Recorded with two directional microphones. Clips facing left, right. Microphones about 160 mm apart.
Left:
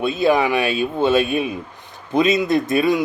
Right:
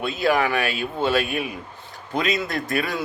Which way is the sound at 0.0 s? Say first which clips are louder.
Left 4 dB; 20° left (ahead or behind).